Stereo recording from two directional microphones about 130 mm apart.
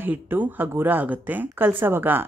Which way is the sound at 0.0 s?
15° right (ahead or behind).